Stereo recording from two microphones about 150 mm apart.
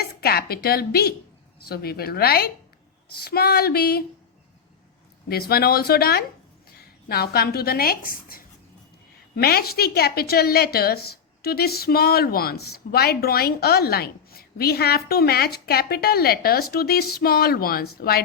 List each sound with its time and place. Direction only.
0.0 s a woman's voice: 90° left
5.3 s a woman's voice: 90° left; by 8.4 s 75° left (ahead or behind)
9.3 s a woman's voice: 90° left